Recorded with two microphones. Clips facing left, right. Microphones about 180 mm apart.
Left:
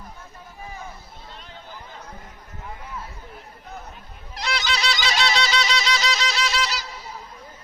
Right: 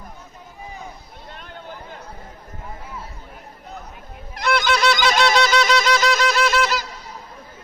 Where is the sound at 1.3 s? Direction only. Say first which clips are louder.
Right 5 dB; 55° right (ahead or behind).